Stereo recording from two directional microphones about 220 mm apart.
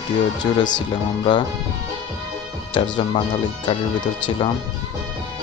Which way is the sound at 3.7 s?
20° left (ahead or behind).